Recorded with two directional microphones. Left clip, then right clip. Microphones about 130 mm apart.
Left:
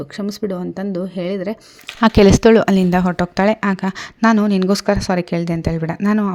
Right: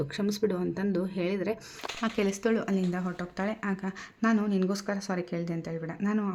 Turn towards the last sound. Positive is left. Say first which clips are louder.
# left 13 dB
turn(degrees=80)